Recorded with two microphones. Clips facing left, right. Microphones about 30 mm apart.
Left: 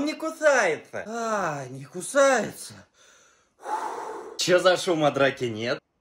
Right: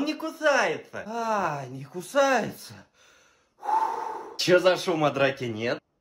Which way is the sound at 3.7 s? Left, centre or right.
Right.